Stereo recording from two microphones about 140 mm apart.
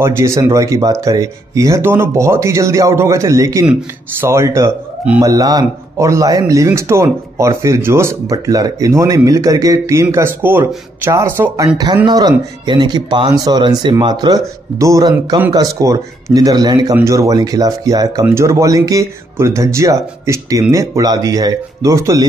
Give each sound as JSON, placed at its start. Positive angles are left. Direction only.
{"t": 0.0, "sound": "speech", "side_deg": -20}